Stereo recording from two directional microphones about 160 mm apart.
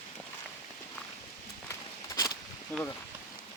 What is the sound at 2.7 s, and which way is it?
Speech, 10° left (ahead or behind).